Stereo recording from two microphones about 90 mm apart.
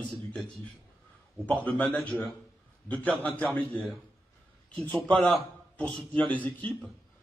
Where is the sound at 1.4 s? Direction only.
15° left (ahead or behind).